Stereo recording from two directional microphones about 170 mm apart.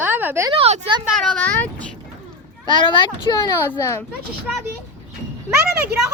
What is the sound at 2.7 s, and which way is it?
A child's voice, 30° left (ahead or behind).